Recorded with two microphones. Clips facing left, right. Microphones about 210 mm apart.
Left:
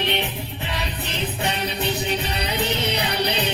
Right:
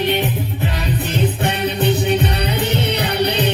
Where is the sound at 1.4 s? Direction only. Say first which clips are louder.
Right 6 dB; 55° right (ahead or behind).